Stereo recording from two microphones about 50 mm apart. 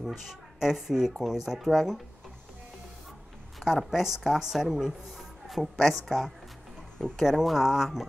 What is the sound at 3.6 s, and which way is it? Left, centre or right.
Speech, centre.